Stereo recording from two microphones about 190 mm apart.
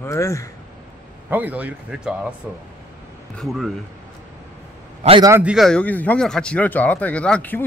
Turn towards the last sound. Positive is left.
turn(degrees=5)  # may be behind; listen again after turning